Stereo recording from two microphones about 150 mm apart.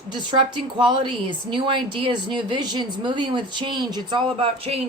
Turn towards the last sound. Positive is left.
turn(degrees=-40)  # may be behind; listen again after turning